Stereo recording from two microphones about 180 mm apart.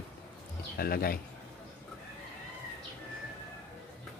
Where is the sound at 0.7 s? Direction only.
55° left (ahead or behind).